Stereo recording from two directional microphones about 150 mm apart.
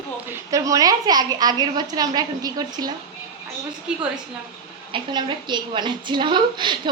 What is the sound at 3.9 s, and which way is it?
Speech, 5° right (ahead or behind).